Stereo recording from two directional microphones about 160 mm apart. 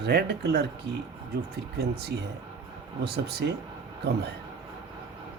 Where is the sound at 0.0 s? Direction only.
90° right.